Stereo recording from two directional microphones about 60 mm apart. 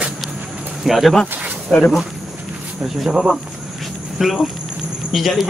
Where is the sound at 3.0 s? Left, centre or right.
Centre.